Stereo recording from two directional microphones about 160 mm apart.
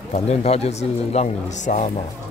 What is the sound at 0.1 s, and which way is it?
Speech, 40° left (ahead or behind).